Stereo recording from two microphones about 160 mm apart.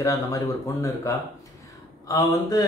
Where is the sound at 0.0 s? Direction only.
20° left (ahead or behind).